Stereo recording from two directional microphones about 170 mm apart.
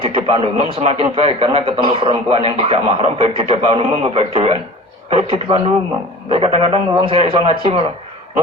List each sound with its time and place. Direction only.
0.0 s a man's voice: 30° right (ahead or behind)